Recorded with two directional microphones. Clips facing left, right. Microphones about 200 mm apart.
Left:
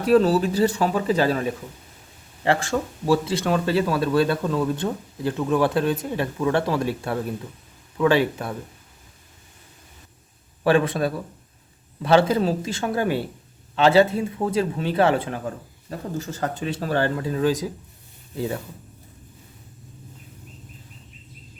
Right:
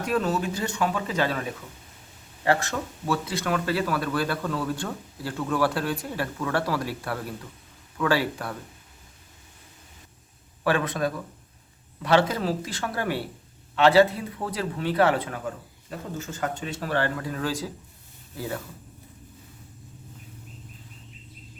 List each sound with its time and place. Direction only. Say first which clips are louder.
0.0 s speech: left 8 dB; 35° left (ahead or behind)
10.6 s speech: left 5 dB; 30° left (ahead or behind)